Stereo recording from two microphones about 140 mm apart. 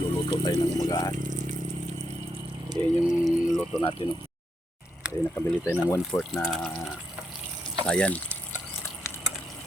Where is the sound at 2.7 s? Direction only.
40° right (ahead or behind).